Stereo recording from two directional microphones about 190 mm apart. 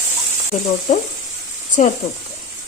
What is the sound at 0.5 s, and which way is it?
Speech, 35° left (ahead or behind).